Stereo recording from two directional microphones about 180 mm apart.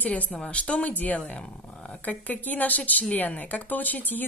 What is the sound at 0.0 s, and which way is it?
Speech, 10° left (ahead or behind).